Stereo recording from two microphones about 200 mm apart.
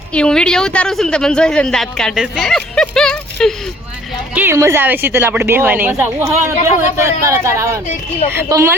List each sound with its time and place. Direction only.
0.1 s speech: 5° left (ahead or behind)
4.4 s a woman's voice: 10° right (ahead or behind)